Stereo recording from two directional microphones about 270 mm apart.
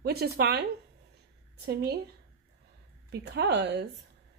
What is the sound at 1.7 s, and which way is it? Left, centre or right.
Speech, right.